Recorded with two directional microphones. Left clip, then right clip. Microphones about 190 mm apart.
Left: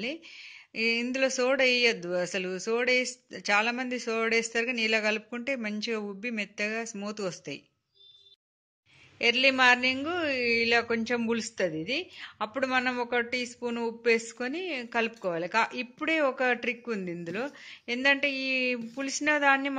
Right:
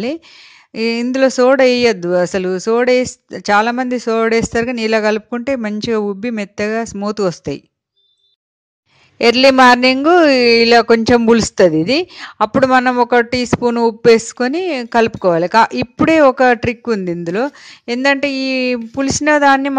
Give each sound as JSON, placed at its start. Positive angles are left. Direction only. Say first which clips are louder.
{"t": 0.0, "sound": "speech", "louder": "right 13 dB", "side_deg": -50}
{"t": 9.2, "sound": "speech", "louder": "right 14 dB", "side_deg": -50}